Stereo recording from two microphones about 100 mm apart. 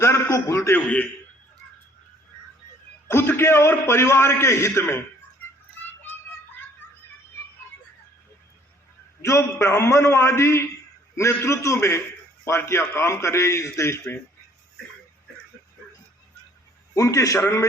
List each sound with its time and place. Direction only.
0.0 s a sound: 25° left (ahead or behind)
3.1 s a man's voice: 25° left (ahead or behind)
9.2 s a man's voice: 30° left (ahead or behind)
16.9 s a man's voice: 30° left (ahead or behind)